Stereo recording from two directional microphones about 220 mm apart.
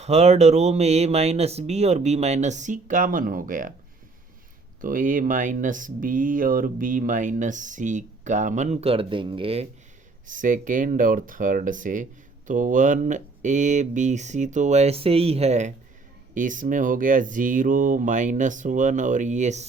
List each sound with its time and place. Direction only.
0.0 s speech: 30° right (ahead or behind)
4.8 s speech: 40° right (ahead or behind)
10.2 s speech: 35° right (ahead or behind)